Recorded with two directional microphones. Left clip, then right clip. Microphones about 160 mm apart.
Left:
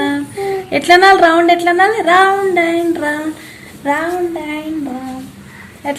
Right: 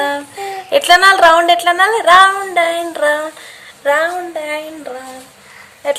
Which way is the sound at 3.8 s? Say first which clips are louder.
Right 2 dB; 40° right (ahead or behind).